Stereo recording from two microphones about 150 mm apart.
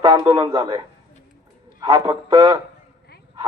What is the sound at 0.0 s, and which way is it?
Speech, 30° right (ahead or behind).